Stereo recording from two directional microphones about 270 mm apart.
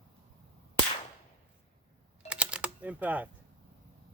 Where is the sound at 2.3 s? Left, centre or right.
Centre.